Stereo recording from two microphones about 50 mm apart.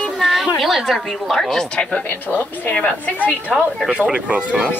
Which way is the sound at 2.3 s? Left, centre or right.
Left.